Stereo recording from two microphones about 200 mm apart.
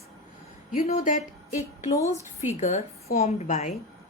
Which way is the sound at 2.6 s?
35° left (ahead or behind).